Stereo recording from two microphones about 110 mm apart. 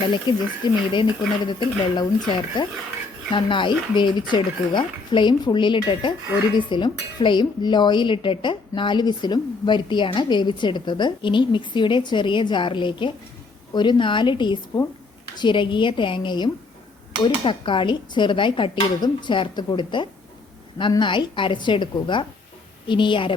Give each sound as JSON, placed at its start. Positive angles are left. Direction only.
{"t": 0.1, "sound": "speech", "side_deg": 45}